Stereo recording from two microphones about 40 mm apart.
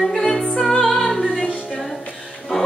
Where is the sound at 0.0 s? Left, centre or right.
Centre.